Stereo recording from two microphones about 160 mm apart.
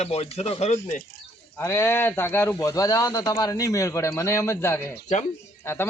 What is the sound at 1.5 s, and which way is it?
Speech, 15° left (ahead or behind).